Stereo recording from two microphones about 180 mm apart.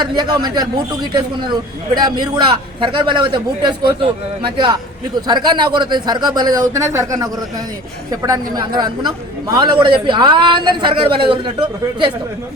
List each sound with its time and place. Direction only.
0.0 s a man's voice: 25° right (ahead or behind)
2.0 s a man's voice: 25° right (ahead or behind)